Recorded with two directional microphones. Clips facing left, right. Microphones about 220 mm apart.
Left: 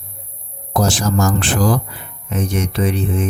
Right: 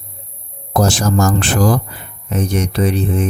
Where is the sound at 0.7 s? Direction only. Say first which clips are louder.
Right 2 dB; 45° right (ahead or behind).